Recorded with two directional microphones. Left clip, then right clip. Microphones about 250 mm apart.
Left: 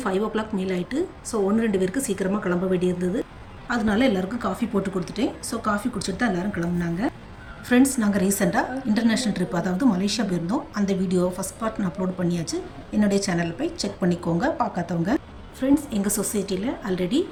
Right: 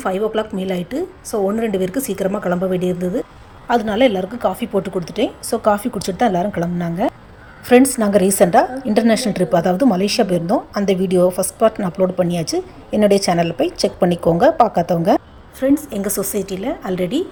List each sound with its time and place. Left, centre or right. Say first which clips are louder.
0.0 s a woman's voice: right 6 dB; centre